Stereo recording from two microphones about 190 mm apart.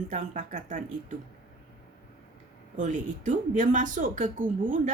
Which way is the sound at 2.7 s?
40° right (ahead or behind).